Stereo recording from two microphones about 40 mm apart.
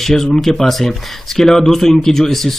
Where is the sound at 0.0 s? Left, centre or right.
Centre.